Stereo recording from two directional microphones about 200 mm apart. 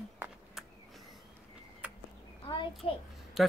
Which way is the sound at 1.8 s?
5° right (ahead or behind).